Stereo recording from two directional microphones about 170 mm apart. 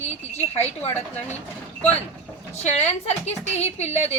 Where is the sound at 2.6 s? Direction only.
40° left (ahead or behind).